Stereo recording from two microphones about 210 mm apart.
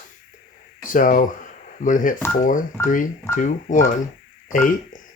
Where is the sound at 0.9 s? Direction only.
40° left (ahead or behind).